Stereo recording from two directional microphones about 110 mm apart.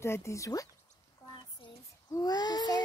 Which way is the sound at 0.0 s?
25° left (ahead or behind).